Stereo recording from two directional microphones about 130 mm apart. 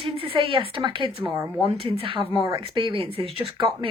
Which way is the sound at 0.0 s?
40° right (ahead or behind).